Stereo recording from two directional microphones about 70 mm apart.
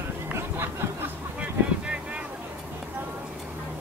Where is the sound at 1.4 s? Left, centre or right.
Centre.